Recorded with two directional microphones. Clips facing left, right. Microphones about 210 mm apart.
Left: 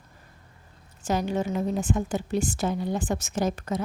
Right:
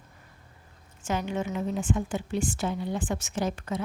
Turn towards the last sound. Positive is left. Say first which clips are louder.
# left 3 dB
turn(degrees=40)  # may be behind; listen again after turning